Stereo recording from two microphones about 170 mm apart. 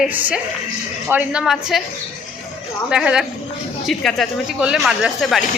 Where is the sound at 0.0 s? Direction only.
10° right (ahead or behind).